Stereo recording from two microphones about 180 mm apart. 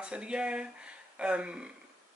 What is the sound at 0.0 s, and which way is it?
Speech, 5° right (ahead or behind).